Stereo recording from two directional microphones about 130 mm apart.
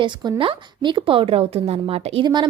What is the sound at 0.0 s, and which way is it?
A woman's voice, 35° right (ahead or behind).